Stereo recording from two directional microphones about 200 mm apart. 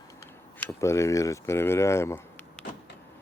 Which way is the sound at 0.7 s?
15° left (ahead or behind).